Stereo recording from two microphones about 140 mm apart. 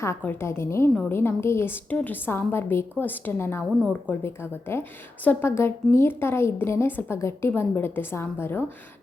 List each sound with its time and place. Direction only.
0.0 s a woman's voice: 15° left (ahead or behind)
3.6 s a woman's voice: centre (ahead or behind)
4.7 s a woman's voice: 15° left (ahead or behind)